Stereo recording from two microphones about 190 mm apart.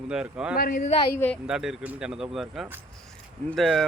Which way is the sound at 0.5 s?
50° left (ahead or behind).